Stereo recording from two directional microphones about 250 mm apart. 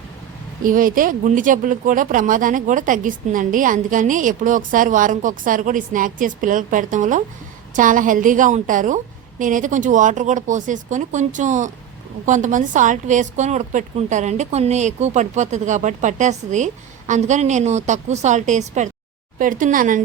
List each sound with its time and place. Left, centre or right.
0.6 s speech: right